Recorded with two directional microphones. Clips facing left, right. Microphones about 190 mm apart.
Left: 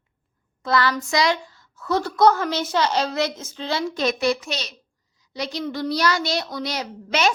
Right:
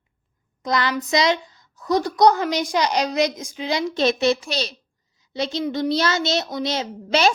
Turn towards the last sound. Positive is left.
turn(degrees=-30)  # may be behind; listen again after turning